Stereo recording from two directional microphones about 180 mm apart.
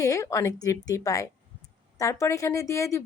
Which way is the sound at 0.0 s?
15° left (ahead or behind).